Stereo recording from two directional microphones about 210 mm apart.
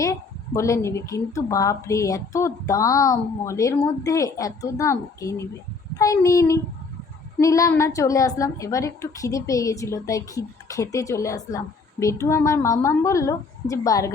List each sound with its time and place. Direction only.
0.0 s a woman's voice: 15° left (ahead or behind)